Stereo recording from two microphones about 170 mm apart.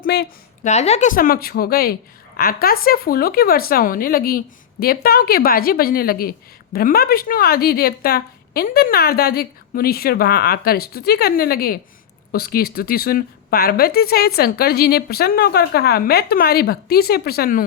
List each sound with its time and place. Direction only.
0.0 s a woman's voice: 70° left (ahead or behind)
0.6 s a woman's voice: 40° left (ahead or behind); by 17.7 s 60° left (ahead or behind)